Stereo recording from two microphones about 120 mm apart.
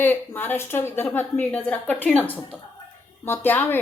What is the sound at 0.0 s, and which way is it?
A woman's voice, 15° left (ahead or behind).